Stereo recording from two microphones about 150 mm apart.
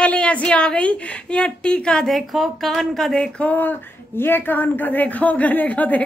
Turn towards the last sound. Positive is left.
turn(degrees=10)  # may be behind; listen again after turning